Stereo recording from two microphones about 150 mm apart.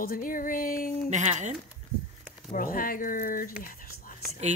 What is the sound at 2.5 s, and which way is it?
Speech, 70° left (ahead or behind).